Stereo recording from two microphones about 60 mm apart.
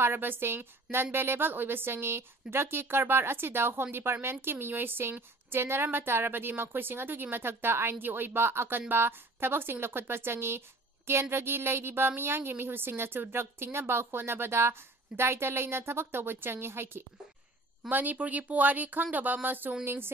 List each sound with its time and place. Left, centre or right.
0.0 s a woman's voice: right
17.8 s a woman's voice: right